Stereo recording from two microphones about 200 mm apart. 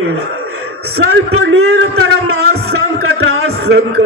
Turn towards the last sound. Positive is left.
turn(degrees=-90)